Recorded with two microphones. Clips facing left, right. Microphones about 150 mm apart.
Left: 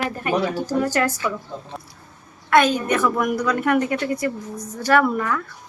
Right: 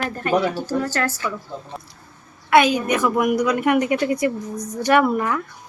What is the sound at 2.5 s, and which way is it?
A woman's voice, 10° right (ahead or behind).